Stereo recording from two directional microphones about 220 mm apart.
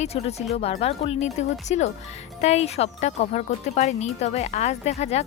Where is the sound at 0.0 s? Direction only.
30° left (ahead or behind).